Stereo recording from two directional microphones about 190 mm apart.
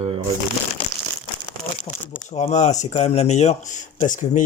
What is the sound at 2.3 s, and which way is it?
Speech, 40° left (ahead or behind).